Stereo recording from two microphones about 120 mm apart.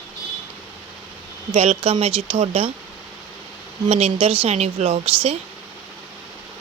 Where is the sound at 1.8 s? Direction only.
50° right (ahead or behind).